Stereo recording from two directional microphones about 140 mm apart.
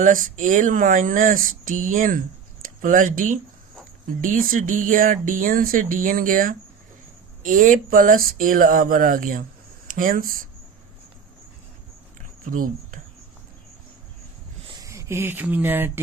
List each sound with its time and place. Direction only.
0.0 s speech: 70° right (ahead or behind); by 10.4 s 90° right
12.5 s speech: 75° right (ahead or behind)
14.8 s speech: 20° right (ahead or behind)